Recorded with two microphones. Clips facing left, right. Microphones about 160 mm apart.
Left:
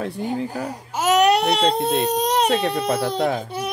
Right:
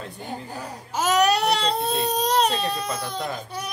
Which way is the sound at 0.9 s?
20° left (ahead or behind).